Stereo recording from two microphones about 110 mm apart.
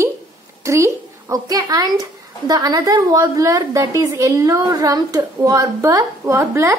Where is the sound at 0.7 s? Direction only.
25° right (ahead or behind).